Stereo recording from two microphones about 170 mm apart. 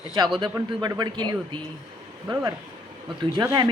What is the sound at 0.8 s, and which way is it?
Speech, 25° right (ahead or behind).